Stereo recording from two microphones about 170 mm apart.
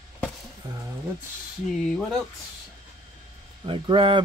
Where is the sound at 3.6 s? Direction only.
30° right (ahead or behind).